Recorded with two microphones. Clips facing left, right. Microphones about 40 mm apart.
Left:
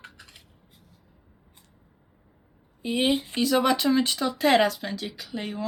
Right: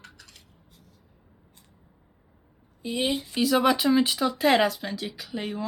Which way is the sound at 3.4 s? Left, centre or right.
Centre.